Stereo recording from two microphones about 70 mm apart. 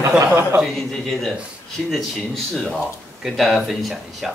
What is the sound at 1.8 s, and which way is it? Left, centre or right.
Speech, centre.